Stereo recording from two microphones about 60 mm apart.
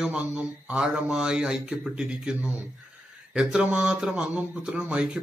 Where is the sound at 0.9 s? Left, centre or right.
Centre.